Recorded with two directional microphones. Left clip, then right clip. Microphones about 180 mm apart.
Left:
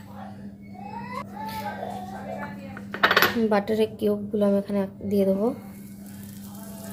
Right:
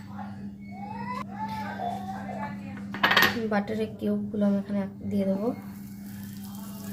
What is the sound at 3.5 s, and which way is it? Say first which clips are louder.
A woman's voice: left 6 dB; 30° left (ahead or behind).